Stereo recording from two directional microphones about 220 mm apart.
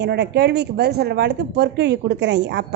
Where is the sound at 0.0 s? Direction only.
50° right (ahead or behind).